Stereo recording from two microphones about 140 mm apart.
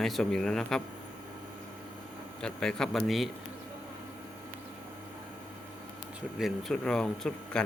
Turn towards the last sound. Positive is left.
turn(degrees=5)  # may be behind; listen again after turning